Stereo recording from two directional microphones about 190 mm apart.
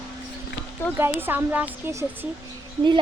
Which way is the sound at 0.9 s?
10° right (ahead or behind).